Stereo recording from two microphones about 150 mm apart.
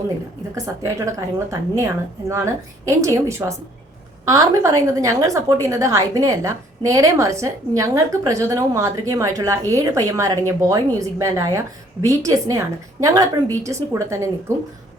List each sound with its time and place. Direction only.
0.5 s a woman's voice: 20° right (ahead or behind)